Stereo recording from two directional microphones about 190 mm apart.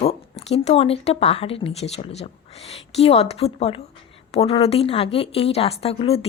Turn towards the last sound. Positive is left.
turn(degrees=30)  # may be behind; listen again after turning